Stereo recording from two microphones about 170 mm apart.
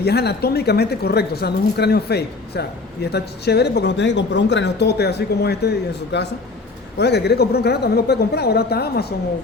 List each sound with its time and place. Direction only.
0.0 s speech: 75° left (ahead or behind)